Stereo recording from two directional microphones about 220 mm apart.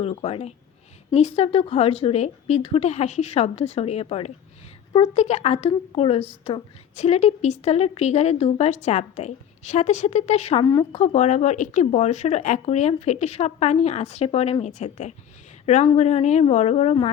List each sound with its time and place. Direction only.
0.0 s a woman's voice: 25° left (ahead or behind)
10.9 s a woman's voice: 30° left (ahead or behind)